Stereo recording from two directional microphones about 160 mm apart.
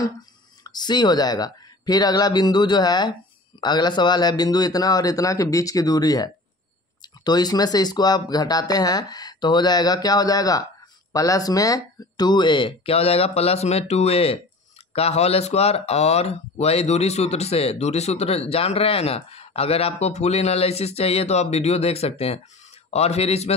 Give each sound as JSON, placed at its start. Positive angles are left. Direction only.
{"t": 0.7, "sound": "speech", "side_deg": 25}